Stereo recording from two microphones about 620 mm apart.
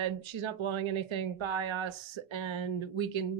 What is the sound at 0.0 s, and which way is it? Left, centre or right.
Speech, right.